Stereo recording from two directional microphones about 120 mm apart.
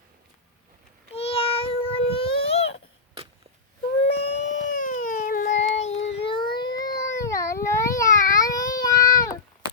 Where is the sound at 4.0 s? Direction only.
65° left (ahead or behind).